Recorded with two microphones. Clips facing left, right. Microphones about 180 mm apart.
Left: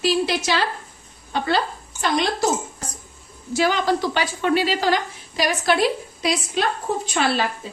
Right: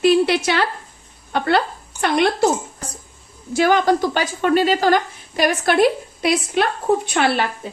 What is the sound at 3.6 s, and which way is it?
A woman's voice, 55° right (ahead or behind).